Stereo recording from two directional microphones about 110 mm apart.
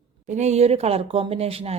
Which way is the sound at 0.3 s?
90° right.